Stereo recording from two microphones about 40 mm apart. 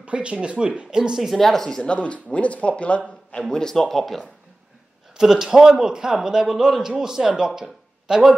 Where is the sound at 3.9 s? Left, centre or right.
Centre.